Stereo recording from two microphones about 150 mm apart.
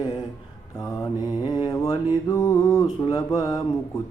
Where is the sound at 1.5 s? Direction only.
25° left (ahead or behind).